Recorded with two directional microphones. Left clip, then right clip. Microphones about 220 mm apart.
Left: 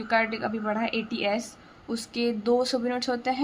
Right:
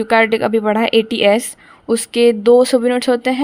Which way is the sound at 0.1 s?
45° right (ahead or behind).